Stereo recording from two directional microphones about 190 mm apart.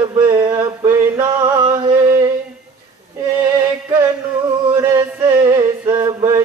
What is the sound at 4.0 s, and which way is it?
Music, 20° right (ahead or behind).